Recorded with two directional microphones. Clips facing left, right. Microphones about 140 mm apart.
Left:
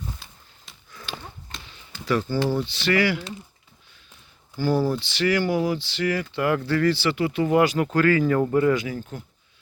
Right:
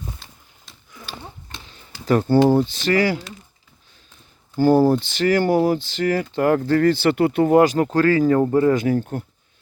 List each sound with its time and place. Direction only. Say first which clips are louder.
0.2 s a sound: right 1 dB; centre (ahead or behind)
1.7 s speech: right 5 dB; 45° right (ahead or behind)
4.5 s speech: right 8 dB; 50° right (ahead or behind); by 8.8 s 35° right (ahead or behind)
8.8 s speech: right 11 dB; 50° right (ahead or behind)